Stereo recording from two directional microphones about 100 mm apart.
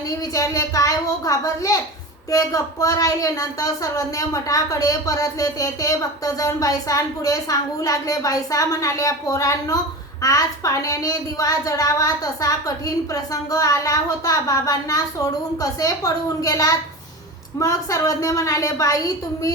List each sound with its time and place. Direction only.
0.1 s a child's voice: 35° left (ahead or behind)